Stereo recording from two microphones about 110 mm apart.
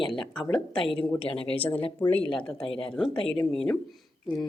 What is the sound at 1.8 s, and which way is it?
Speech, 50° left (ahead or behind).